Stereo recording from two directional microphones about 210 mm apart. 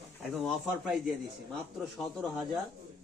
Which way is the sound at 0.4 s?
Centre (ahead or behind).